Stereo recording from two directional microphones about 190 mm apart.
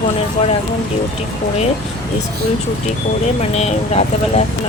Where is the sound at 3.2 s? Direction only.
35° left (ahead or behind).